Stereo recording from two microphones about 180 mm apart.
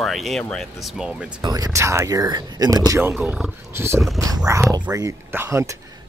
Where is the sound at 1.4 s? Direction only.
20° right (ahead or behind).